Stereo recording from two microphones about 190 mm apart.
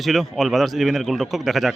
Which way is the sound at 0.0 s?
Centre (ahead or behind).